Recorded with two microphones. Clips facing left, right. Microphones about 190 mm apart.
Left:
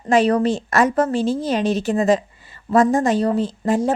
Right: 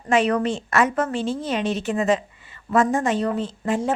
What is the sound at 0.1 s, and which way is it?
Speech, 35° left (ahead or behind).